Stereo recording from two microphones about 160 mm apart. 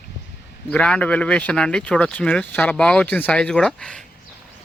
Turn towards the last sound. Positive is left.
turn(degrees=5)  # may be behind; listen again after turning